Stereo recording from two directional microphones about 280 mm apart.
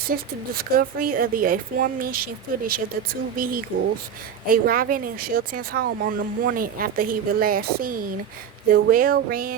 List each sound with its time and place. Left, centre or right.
0.1 s speech: right